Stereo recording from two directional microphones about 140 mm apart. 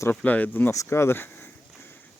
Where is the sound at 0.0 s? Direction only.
10° left (ahead or behind).